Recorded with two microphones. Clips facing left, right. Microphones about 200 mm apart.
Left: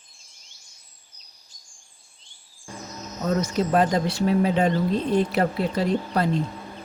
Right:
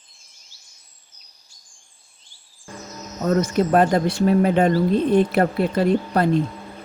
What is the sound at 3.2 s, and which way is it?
Speech, 55° right (ahead or behind).